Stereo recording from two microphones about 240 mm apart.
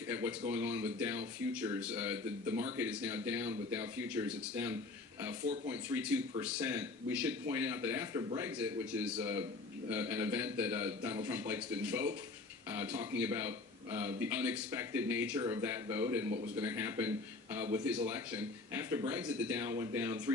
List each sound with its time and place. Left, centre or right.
0.1 s a man's voice: centre